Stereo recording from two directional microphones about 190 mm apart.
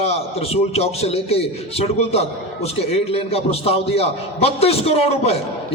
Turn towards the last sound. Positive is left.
turn(degrees=35)  # may be behind; listen again after turning